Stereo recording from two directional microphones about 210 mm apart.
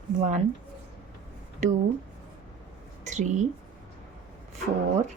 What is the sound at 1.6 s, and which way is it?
Speech, 35° right (ahead or behind).